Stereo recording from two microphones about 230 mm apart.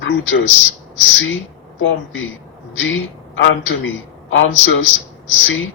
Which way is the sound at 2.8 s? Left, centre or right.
Left.